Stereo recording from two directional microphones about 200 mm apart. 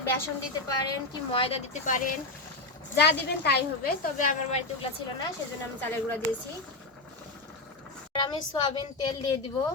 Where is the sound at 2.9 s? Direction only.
55° left (ahead or behind).